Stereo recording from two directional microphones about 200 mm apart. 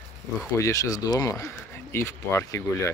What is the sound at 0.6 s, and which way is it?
Speech, 15° left (ahead or behind).